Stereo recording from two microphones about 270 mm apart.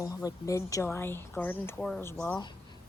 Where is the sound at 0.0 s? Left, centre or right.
Centre.